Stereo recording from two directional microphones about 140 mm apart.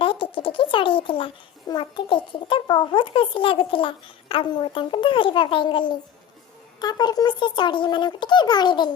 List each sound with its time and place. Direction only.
0.0 s a child's voice: 35° left (ahead or behind)